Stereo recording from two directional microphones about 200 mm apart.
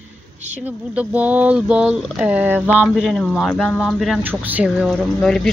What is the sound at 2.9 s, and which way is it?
Speech, 5° left (ahead or behind).